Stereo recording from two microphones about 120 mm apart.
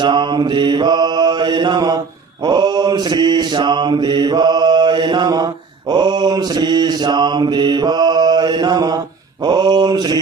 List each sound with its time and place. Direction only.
0.0 s mantra: 40° right (ahead or behind)